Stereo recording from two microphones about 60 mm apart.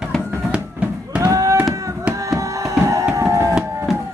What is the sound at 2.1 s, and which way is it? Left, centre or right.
Music, right.